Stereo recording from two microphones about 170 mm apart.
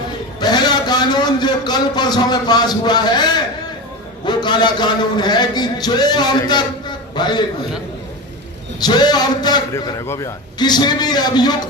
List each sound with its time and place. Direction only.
0.3 s a sound: 25° left (ahead or behind)
4.3 s a man's voice: 25° left (ahead or behind)
8.8 s a man's voice: 25° left (ahead or behind)